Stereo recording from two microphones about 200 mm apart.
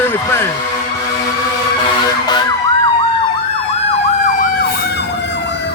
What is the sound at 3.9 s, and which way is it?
Emergency vehicle, 40° left (ahead or behind).